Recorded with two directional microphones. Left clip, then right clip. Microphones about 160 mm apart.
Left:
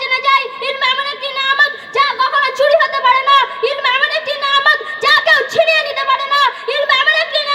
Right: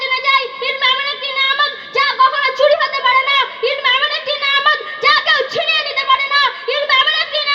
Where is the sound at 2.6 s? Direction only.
35° left (ahead or behind).